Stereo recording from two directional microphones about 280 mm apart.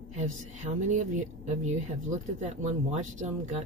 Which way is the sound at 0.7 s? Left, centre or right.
Right.